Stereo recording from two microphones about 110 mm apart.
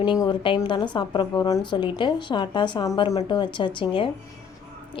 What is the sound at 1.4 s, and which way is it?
Speech, 30° left (ahead or behind).